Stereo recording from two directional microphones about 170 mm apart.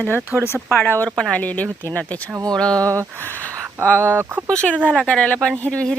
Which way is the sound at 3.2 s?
10° left (ahead or behind).